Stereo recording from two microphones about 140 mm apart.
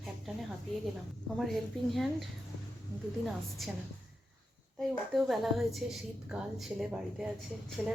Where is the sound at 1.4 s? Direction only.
Centre (ahead or behind).